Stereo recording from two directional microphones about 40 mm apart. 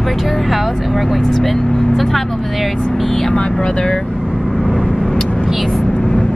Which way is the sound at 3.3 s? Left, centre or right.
Left.